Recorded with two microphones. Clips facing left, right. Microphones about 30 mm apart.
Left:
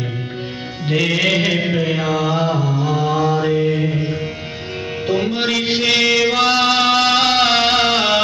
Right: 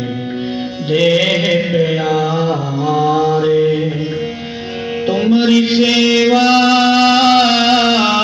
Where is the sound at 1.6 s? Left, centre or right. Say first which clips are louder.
Right 4 dB; centre.